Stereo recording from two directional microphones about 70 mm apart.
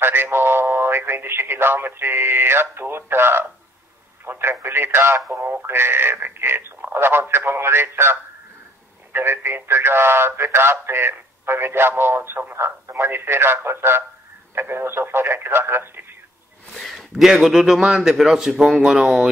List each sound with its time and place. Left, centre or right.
0.0 s speech: right
16.7 s a man's voice: centre